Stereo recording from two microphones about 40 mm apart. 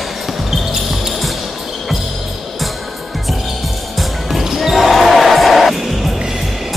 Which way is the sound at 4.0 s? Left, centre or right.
Centre.